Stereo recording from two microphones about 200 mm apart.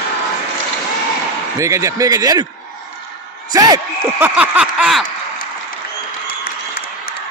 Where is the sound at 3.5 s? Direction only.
20° right (ahead or behind).